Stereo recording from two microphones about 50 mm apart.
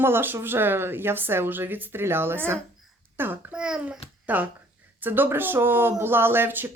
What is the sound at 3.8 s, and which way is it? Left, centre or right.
A child's voice, right.